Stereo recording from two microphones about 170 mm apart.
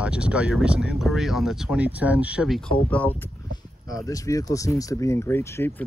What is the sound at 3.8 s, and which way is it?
Speech, 20° left (ahead or behind).